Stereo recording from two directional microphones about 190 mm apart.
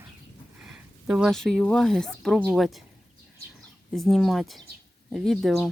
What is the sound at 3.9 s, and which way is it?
Speech, centre (ahead or behind).